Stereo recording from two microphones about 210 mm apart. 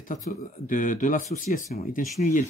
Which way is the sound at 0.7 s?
35° left (ahead or behind).